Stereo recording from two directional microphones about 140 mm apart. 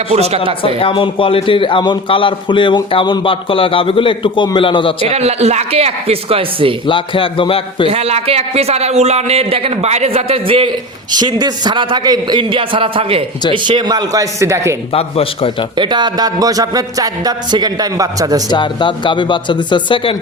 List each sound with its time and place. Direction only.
0.1 s a man's voice: 50° right (ahead or behind)
0.6 s a man's voice: 40° left (ahead or behind)
5.0 s a man's voice: 50° right (ahead or behind)
6.8 s a man's voice: 35° left (ahead or behind)
7.9 s a man's voice: 45° right (ahead or behind); by 14.8 s 20° right (ahead or behind)
14.9 s a man's voice: 45° left (ahead or behind)
15.7 s speech: 35° right (ahead or behind)
18.5 s a man's voice: 35° left (ahead or behind)